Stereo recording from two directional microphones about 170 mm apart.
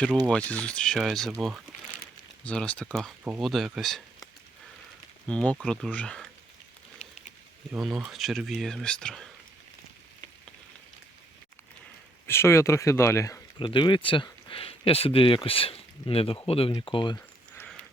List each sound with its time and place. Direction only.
0.3 s speech: 5° left (ahead or behind)
5.3 s speech: 5° left (ahead or behind)
7.7 s speech: 5° right (ahead or behind)
12.3 s speech: 15° left (ahead or behind)
13.6 s speech: 30° left (ahead or behind)